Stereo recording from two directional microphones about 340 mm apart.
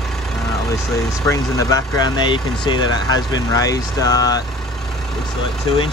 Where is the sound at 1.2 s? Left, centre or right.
Centre.